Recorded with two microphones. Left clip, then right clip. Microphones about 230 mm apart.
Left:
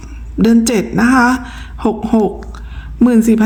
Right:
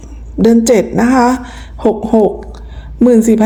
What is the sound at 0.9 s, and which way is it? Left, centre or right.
Speech, left.